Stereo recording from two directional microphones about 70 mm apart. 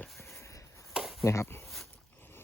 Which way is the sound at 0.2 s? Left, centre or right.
Left.